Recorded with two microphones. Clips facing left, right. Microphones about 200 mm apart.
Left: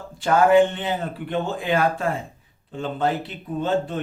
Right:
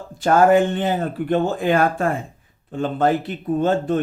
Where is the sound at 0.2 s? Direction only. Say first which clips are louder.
Right 1 dB; 45° right (ahead or behind).